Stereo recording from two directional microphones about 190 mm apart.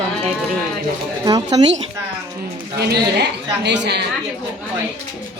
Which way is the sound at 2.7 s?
60° right (ahead or behind).